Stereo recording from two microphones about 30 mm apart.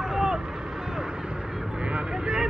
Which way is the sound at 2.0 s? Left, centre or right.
Centre.